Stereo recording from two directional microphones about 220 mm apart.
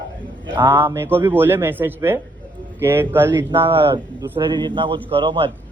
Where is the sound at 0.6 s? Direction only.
10° right (ahead or behind).